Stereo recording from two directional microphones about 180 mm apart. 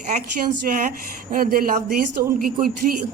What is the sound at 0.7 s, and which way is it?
A woman's voice, 50° right (ahead or behind).